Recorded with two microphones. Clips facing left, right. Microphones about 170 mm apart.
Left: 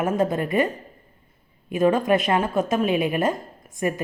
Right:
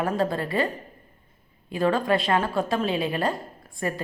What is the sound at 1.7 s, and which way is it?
A woman's voice, 20° left (ahead or behind).